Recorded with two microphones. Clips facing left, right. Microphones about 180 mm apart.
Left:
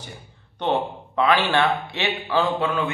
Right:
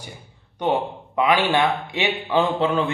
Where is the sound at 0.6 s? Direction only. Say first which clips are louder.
Right 1 dB; 15° right (ahead or behind).